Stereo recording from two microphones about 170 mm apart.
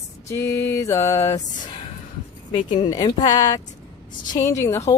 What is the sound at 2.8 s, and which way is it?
Speech, 25° left (ahead or behind).